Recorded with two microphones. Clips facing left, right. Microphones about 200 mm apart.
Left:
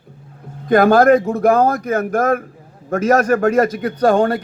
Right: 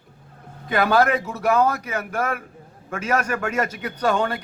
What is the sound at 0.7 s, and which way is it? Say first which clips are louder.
Speech: left 8 dB; 45° left (ahead or behind).